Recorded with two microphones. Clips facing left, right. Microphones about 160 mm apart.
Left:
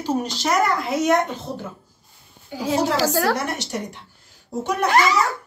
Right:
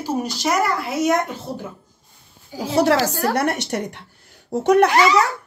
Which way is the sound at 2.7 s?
70° right (ahead or behind).